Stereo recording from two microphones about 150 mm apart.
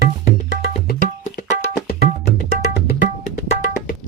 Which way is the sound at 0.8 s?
55° left (ahead or behind).